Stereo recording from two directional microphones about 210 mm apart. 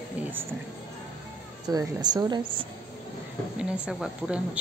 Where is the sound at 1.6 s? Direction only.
20° right (ahead or behind).